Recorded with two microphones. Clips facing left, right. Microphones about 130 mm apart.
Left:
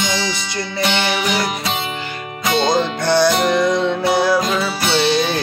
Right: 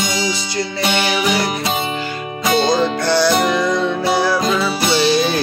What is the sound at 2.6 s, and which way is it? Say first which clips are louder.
Music: right 1 dB; 20° left (ahead or behind).